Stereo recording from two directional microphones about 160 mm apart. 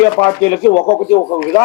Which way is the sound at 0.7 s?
30° left (ahead or behind).